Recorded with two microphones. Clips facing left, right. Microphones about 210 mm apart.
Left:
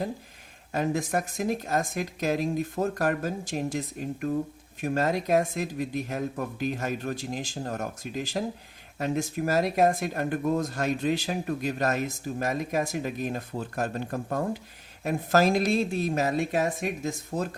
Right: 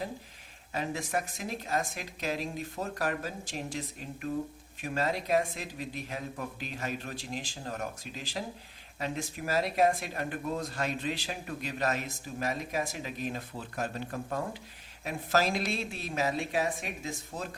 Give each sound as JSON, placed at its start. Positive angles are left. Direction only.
{"t": 0.7, "sound": "speech", "side_deg": 45}